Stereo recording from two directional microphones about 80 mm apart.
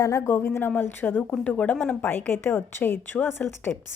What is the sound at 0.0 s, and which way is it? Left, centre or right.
Speech, left.